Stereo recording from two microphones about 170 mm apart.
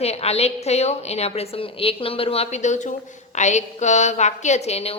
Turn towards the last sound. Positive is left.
turn(degrees=40)  # may be behind; listen again after turning